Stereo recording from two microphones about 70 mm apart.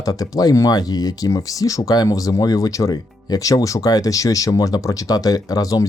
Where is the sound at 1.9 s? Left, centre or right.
Left.